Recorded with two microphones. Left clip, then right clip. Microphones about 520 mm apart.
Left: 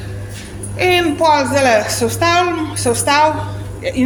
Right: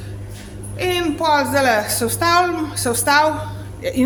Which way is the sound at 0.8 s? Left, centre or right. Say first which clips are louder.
Left 6 dB; right.